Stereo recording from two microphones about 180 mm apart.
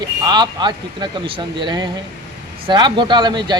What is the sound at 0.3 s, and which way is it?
Speech, 25° right (ahead or behind).